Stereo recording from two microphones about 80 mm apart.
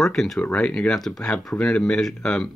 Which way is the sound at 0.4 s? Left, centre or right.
Centre.